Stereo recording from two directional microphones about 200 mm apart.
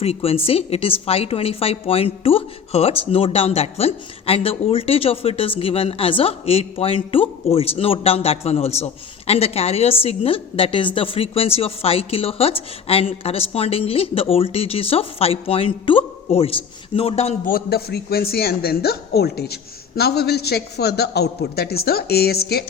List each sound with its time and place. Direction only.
0.0 s a woman's voice: 30° left (ahead or behind)
17.5 s a man's voice: 50° left (ahead or behind)